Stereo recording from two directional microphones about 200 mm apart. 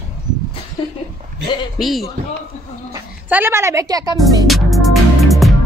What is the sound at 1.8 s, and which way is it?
Speech, centre (ahead or behind).